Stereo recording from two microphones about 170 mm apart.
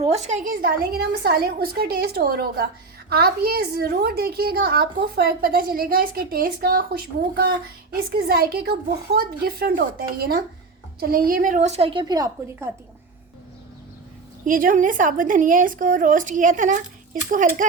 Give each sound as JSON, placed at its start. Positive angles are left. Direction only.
{"t": 0.0, "sound": "a woman's voice", "side_deg": -40}
{"t": 14.4, "sound": "a woman's voice", "side_deg": -50}